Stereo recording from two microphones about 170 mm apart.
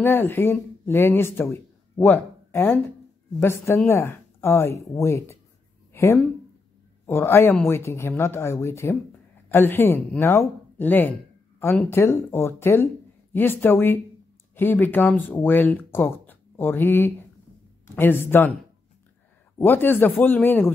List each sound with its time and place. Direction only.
0.0 s speech: 10° left (ahead or behind)
19.6 s speech: 10° left (ahead or behind)